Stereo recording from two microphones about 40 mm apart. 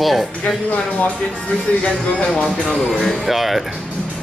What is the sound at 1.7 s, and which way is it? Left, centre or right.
Speech, left.